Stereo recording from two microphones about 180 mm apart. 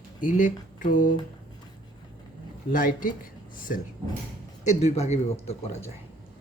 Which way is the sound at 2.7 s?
50° left (ahead or behind).